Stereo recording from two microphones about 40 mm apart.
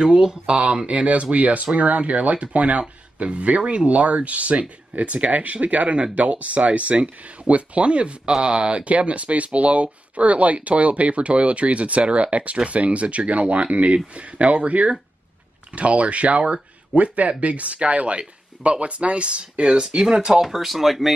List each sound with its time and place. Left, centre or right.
0.0 s speech: right
20.4 s speech: centre